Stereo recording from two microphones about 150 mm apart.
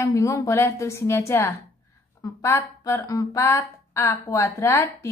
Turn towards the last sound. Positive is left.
turn(degrees=15)  # may be behind; listen again after turning